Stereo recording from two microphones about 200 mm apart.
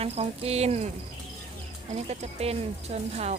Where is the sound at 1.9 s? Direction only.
30° right (ahead or behind).